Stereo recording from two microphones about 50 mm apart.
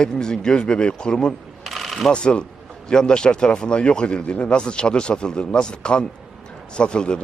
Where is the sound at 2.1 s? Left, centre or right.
Centre.